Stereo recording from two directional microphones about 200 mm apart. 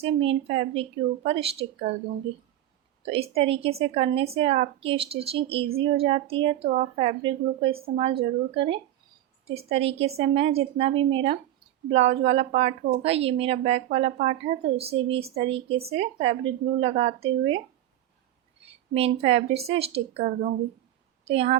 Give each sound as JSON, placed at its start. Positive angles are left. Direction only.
{"t": 0.0, "sound": "a woman's voice", "side_deg": -25}
{"t": 3.1, "sound": "a woman's voice", "side_deg": -30}
{"t": 18.9, "sound": "a woman's voice", "side_deg": -30}